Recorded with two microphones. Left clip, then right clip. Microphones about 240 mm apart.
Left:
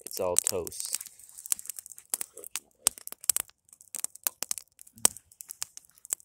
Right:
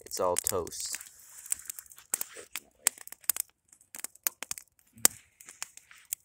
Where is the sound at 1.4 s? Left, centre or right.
Centre.